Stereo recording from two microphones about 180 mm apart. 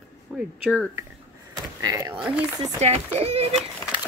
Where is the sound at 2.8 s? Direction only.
40° right (ahead or behind).